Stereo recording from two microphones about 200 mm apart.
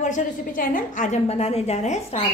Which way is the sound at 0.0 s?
40° left (ahead or behind).